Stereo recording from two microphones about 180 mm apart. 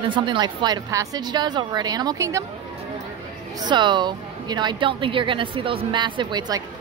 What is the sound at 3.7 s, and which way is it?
A woman's voice, 25° right (ahead or behind).